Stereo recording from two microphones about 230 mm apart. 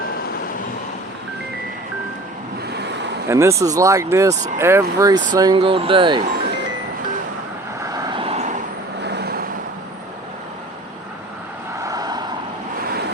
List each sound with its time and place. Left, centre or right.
2.7 s a sound: right
3.2 s speech: centre
7.9 s vehicle: centre
9.0 s vehicle: right
11.8 s vehicle: centre